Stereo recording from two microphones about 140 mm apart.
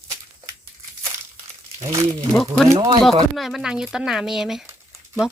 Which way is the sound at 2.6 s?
25° right (ahead or behind).